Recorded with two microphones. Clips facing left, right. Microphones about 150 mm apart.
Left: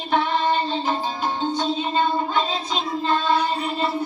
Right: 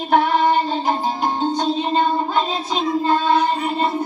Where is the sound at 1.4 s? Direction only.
40° right (ahead or behind).